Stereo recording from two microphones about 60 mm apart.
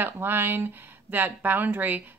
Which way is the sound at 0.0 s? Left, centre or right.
Right.